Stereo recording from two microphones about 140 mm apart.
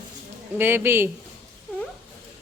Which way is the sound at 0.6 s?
15° right (ahead or behind).